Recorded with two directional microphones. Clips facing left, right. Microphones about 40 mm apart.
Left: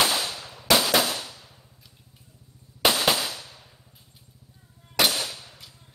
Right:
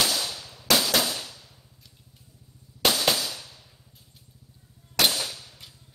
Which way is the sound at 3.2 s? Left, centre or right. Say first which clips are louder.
Left 2 dB; left.